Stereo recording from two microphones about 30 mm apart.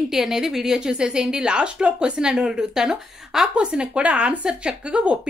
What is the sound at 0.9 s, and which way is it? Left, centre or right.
A woman's voice, right.